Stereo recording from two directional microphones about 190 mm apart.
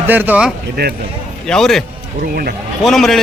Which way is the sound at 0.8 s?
60° right (ahead or behind).